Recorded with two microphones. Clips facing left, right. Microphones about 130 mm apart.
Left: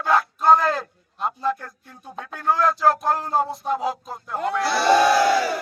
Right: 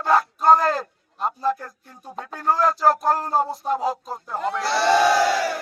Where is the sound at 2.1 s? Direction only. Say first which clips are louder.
Even; centre (ahead or behind).